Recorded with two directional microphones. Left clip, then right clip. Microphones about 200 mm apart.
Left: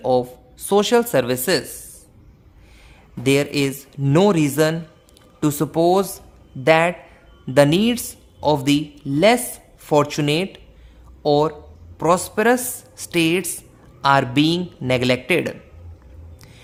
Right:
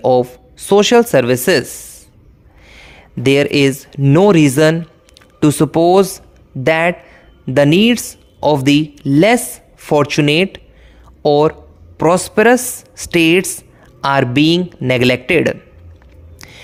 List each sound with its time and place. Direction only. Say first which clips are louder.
0.0 s speech: right 7 dB; 25° right (ahead or behind)
2.6 s a sound: right 11 dB; 35° right (ahead or behind)
4.3 s speech: right 8 dB; 30° right (ahead or behind)